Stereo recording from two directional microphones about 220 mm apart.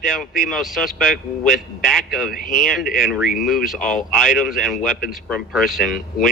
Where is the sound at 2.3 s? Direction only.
40° left (ahead or behind).